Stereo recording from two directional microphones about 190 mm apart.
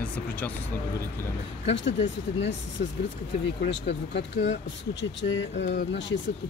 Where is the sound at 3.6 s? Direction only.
65° left (ahead or behind).